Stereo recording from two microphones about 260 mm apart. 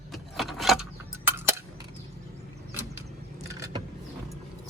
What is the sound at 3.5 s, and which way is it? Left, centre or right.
Vehicle, centre.